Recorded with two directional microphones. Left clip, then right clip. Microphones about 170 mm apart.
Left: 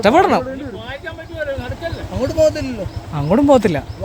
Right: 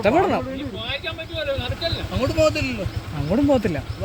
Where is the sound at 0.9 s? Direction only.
30° left (ahead or behind).